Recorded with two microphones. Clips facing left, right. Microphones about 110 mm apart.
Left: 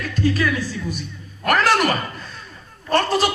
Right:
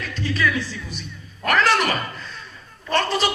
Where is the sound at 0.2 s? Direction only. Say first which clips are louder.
Left 3 dB; 45° left (ahead or behind).